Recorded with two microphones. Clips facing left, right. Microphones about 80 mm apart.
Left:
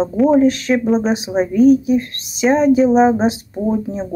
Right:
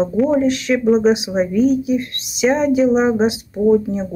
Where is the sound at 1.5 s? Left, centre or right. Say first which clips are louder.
Left 6 dB; left.